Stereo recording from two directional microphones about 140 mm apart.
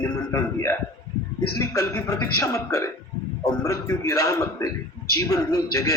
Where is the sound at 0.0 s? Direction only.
25° left (ahead or behind).